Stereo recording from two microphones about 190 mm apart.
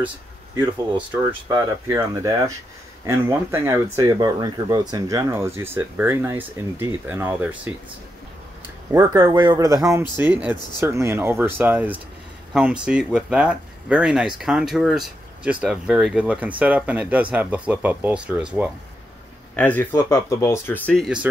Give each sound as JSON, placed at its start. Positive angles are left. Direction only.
{"t": 0.9, "sound": "speech", "side_deg": -10}
{"t": 8.9, "sound": "speech", "side_deg": -20}
{"t": 19.5, "sound": "speech", "side_deg": 10}